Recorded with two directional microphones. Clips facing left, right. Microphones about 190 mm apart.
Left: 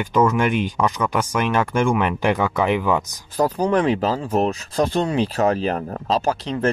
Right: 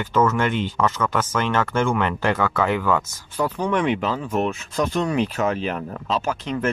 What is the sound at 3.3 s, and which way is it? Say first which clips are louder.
Speech: left 4 dB; 35° left (ahead or behind).